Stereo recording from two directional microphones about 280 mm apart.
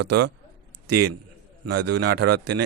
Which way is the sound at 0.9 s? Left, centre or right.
Right.